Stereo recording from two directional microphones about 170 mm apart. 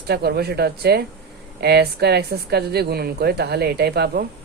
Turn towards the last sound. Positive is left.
turn(degrees=-70)  # may be behind; listen again after turning